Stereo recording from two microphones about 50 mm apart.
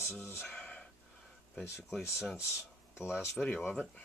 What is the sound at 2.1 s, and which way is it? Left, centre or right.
Speech, centre.